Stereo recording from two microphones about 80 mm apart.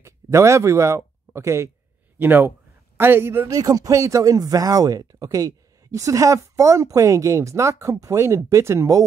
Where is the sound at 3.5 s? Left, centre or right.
Right.